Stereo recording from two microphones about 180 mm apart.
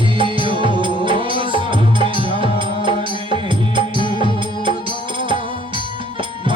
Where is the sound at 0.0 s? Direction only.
30° right (ahead or behind).